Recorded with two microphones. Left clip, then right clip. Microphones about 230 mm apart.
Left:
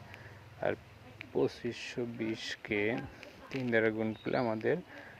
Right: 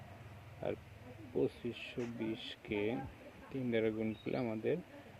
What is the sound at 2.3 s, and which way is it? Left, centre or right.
Speech, centre.